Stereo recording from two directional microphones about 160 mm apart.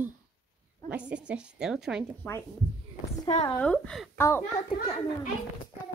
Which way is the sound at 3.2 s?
35° left (ahead or behind).